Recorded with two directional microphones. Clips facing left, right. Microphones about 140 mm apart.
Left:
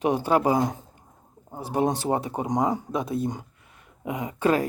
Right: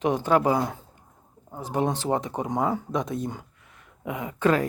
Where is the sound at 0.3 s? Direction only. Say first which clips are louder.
Right 1 dB; 30° left (ahead or behind).